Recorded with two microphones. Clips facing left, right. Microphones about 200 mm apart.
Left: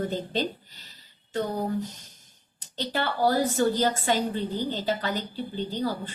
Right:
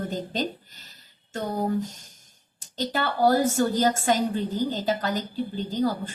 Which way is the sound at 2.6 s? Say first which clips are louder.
Right 2 dB; 45° right (ahead or behind).